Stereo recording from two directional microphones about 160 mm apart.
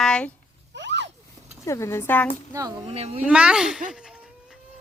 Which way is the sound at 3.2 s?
5° right (ahead or behind).